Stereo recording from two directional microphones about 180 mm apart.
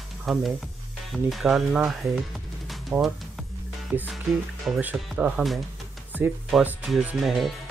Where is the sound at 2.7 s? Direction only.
Centre (ahead or behind).